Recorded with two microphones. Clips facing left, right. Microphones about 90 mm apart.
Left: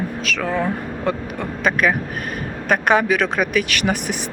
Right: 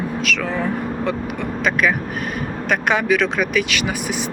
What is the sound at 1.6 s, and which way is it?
Speech, 35° left (ahead or behind).